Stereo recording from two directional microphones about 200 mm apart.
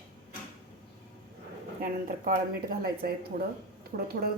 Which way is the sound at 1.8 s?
45° right (ahead or behind).